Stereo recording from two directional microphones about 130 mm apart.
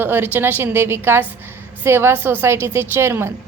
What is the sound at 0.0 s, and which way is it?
A woman's voice, 15° right (ahead or behind).